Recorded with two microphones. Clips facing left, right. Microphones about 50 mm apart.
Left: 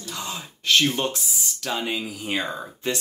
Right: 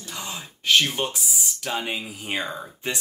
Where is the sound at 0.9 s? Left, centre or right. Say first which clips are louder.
Left 1 dB; centre.